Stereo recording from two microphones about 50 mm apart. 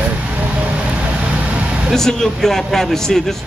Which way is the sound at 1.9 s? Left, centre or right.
Centre.